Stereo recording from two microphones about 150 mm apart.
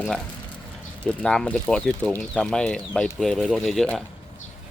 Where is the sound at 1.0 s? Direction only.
5° left (ahead or behind).